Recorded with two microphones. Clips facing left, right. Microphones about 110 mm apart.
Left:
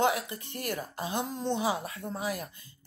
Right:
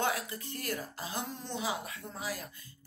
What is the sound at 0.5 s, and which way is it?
A woman's voice, 25° left (ahead or behind).